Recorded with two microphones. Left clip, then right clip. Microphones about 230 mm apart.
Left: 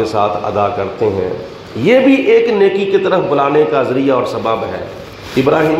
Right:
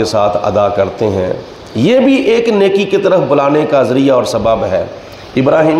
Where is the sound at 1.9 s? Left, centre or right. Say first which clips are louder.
Left 1 dB; right.